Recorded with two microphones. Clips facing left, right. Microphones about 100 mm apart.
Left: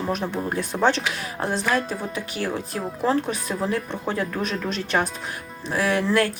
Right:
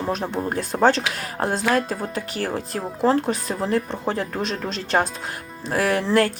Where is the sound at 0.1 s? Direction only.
35° right (ahead or behind).